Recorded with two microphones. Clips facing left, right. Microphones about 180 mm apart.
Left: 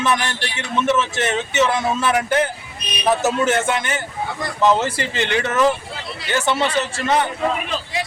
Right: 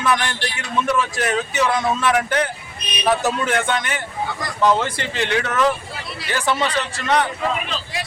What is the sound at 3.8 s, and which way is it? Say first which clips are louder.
Speech: left 2 dB; 30° left (ahead or behind).